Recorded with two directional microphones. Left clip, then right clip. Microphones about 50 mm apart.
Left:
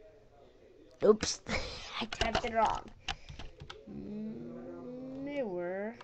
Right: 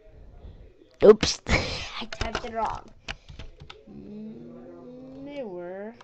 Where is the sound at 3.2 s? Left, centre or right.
Right.